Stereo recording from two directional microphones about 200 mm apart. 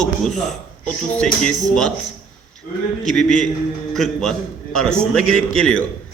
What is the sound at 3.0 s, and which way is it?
A man's voice, centre (ahead or behind).